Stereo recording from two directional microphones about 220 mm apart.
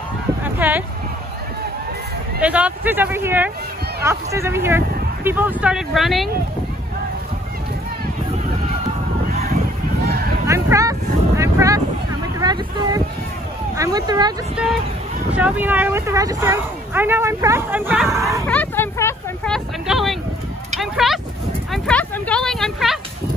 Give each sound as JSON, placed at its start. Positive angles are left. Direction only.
{"t": 0.6, "sound": "speech", "side_deg": -10}
{"t": 2.4, "sound": "speech", "side_deg": -5}
{"t": 10.4, "sound": "vehicle", "side_deg": -15}
{"t": 12.4, "sound": "speech", "side_deg": -15}
{"t": 14.5, "sound": "speech", "side_deg": -5}
{"t": 18.5, "sound": "vehicle", "side_deg": 10}
{"t": 20.7, "sound": "a sound", "side_deg": 0}